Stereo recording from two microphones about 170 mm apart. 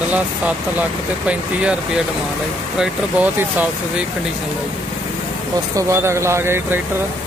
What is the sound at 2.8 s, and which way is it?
Speech, 5° right (ahead or behind).